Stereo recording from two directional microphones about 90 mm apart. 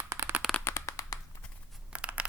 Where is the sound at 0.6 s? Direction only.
35° left (ahead or behind).